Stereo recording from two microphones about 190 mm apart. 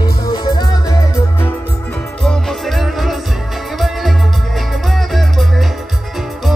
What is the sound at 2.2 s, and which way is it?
Music, centre (ahead or behind).